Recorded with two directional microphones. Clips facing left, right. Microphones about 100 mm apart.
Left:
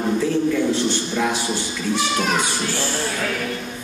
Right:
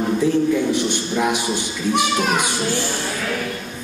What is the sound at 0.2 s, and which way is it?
A man's voice, 15° right (ahead or behind).